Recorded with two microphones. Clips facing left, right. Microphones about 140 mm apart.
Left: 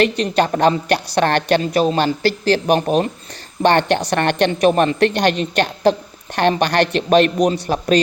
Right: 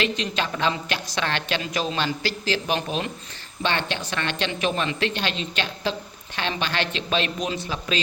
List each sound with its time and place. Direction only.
0.3 s a woman's voice: 50° left (ahead or behind)
0.9 s a man's voice: 55° left (ahead or behind)
1.8 s a woman's voice: 45° left (ahead or behind)
6.7 s a man's voice: 65° left (ahead or behind)
7.7 s a woman's voice: 50° left (ahead or behind)